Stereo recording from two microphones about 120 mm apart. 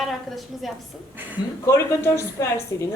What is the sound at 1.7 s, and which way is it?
Speech, 25° left (ahead or behind).